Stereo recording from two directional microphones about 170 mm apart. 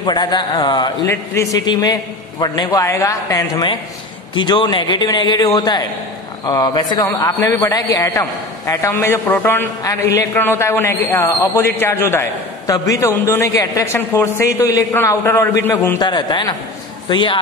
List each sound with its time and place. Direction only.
0.0 s a man's voice: 25° left (ahead or behind)
16.0 s a man's voice: 25° left (ahead or behind)